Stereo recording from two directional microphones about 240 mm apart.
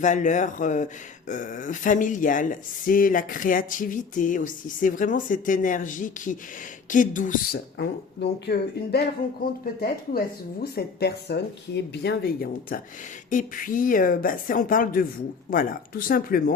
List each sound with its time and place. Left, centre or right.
0.0 s speech: left
7.8 s speech: left